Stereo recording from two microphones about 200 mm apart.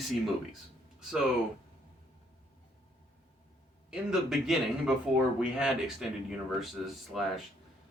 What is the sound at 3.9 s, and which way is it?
Speech, centre (ahead or behind).